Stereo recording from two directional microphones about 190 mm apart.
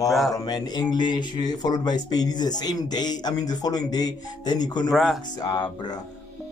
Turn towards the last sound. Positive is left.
turn(degrees=20)  # may be behind; listen again after turning